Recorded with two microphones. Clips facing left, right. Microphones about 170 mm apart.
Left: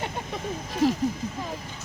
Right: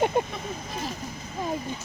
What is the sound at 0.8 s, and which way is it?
Speech, 90° left.